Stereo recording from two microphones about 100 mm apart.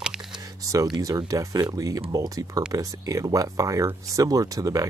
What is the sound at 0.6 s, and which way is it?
Speech, 35° right (ahead or behind).